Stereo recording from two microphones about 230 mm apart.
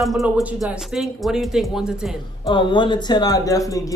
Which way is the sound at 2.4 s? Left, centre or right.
Left.